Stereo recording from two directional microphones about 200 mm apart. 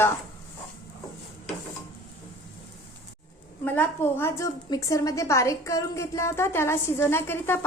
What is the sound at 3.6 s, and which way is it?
A woman's voice, 10° left (ahead or behind).